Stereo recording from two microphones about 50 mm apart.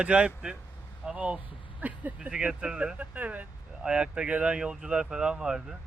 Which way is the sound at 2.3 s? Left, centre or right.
Centre.